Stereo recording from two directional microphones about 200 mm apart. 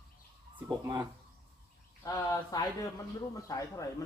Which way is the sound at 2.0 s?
15° left (ahead or behind).